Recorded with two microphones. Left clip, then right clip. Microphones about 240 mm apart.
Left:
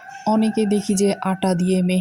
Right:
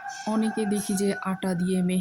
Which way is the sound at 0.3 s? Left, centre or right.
Centre.